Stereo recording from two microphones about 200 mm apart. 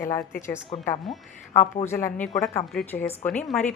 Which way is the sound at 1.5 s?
35° left (ahead or behind).